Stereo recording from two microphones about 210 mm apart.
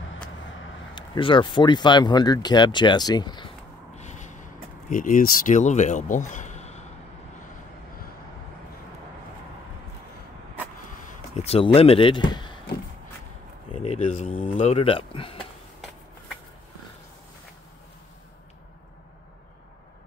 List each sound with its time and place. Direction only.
0.9 s speech: 20° left (ahead or behind)
3.9 s a sound: 35° left (ahead or behind)
11.0 s speech: 35° left (ahead or behind)
13.8 s speech: 30° left (ahead or behind)